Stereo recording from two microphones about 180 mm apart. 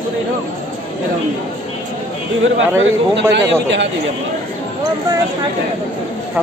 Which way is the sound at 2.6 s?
90° right.